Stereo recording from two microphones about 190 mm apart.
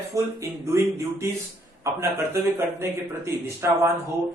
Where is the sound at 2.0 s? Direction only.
15° right (ahead or behind).